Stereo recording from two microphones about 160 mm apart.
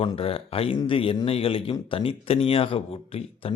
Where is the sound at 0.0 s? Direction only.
35° left (ahead or behind).